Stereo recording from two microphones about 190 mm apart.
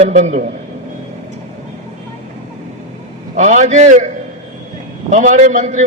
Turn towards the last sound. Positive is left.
turn(degrees=-40)  # may be behind; listen again after turning